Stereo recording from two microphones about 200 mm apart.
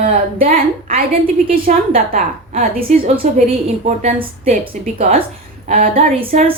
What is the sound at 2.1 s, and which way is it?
A woman's voice, 40° right (ahead or behind).